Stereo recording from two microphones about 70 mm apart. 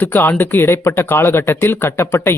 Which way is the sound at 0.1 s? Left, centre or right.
Left.